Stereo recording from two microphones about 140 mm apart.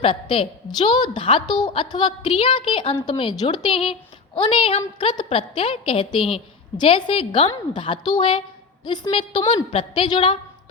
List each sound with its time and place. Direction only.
0.0 s a woman's voice: 35° left (ahead or behind)